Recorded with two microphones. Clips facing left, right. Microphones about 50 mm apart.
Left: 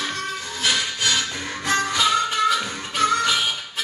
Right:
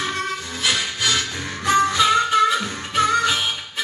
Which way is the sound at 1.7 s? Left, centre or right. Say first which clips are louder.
Right 5 dB; right.